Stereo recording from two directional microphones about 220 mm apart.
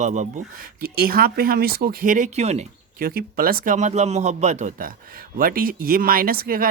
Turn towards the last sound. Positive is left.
turn(degrees=-40)  # may be behind; listen again after turning